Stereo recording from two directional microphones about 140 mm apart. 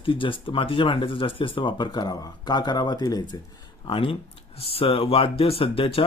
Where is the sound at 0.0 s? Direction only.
40° left (ahead or behind).